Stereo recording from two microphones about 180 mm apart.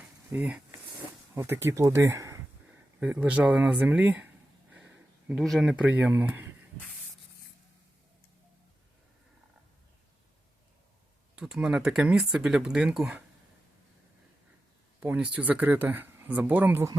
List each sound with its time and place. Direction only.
0.3 s speech: 5° right (ahead or behind)
5.3 s speech: centre (ahead or behind)
11.3 s speech: 5° right (ahead or behind)
15.0 s speech: 10° right (ahead or behind)